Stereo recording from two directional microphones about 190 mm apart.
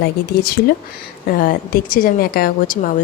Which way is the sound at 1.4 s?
50° left (ahead or behind).